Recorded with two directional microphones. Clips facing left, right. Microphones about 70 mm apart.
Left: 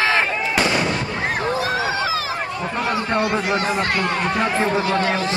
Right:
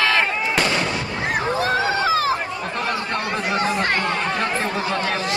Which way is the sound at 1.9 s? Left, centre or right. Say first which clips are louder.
Right 3 dB; right.